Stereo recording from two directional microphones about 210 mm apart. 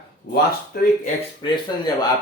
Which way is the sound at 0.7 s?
45° left (ahead or behind).